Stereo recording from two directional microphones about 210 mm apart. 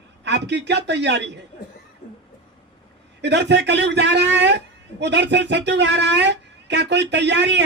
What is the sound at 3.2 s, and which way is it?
Speech, 55° right (ahead or behind).